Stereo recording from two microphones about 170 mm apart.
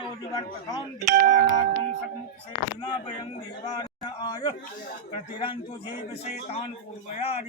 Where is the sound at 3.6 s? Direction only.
25° left (ahead or behind).